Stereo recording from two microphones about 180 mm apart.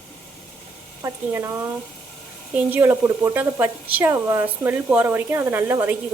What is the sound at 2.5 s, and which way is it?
Speech, 10° right (ahead or behind).